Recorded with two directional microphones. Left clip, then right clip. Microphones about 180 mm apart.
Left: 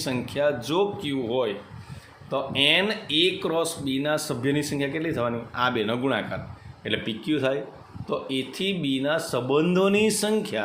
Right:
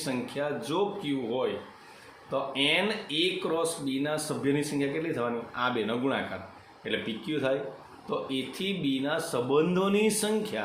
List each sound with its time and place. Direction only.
0.0 s speech: 55° left (ahead or behind)